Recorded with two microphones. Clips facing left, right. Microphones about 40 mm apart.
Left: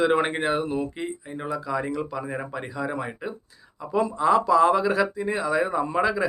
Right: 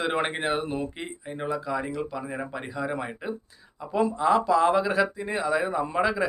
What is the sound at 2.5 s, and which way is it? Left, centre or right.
Speech, centre.